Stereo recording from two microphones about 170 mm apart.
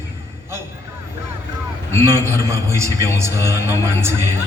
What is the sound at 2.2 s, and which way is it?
A man's voice, 15° right (ahead or behind).